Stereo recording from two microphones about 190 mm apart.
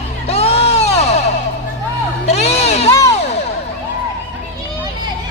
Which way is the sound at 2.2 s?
35° left (ahead or behind).